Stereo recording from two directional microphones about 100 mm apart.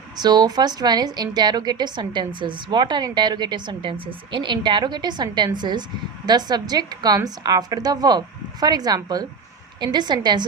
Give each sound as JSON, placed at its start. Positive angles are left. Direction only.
{"t": 0.2, "sound": "a woman's voice", "side_deg": -45}